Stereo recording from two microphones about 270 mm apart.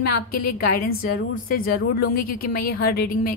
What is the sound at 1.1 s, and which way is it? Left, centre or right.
A woman's voice, left.